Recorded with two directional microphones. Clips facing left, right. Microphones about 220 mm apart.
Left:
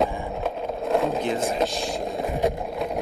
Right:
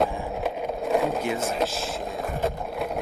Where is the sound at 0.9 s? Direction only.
Centre (ahead or behind).